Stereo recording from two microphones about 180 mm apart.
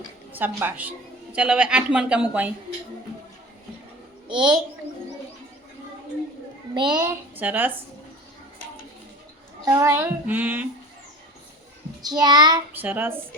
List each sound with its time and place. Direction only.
0.3 s a woman's voice: 10° right (ahead or behind)
4.3 s a child's voice: 25° right (ahead or behind)
6.7 s a child's voice: 25° right (ahead or behind)
7.0 s a woman's voice: 10° right (ahead or behind)
9.6 s a woman's voice: 15° right (ahead or behind)
12.0 s a child's voice: 20° right (ahead or behind)
12.7 s a woman's voice: 10° right (ahead or behind)